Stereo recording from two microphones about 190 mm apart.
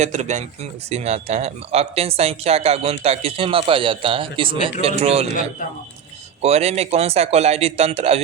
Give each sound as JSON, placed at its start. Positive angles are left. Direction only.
{"t": 0.0, "sound": "speech", "side_deg": -35}
{"t": 6.4, "sound": "speech", "side_deg": -35}